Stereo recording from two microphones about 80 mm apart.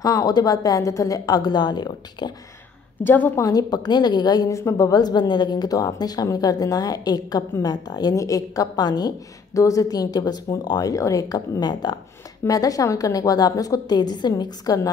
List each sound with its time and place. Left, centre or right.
0.0 s a woman's voice: left
3.0 s a woman's voice: left
3.3 s a woman's voice: left
4.5 s a woman's voice: left
12.4 s a woman's voice: left